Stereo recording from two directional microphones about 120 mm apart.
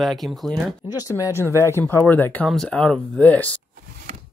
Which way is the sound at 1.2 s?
20° right (ahead or behind).